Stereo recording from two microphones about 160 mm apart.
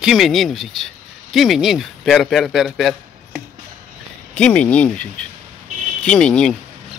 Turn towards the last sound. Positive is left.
turn(degrees=5)  # may be behind; listen again after turning